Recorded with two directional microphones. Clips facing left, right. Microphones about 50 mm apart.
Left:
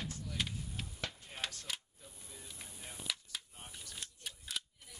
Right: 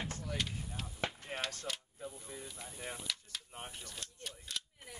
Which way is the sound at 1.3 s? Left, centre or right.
Right.